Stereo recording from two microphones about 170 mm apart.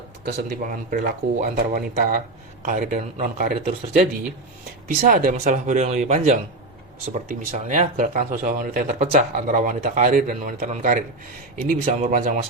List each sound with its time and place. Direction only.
0.3 s speech: 50° right (ahead or behind)
4.9 s speech: 55° right (ahead or behind)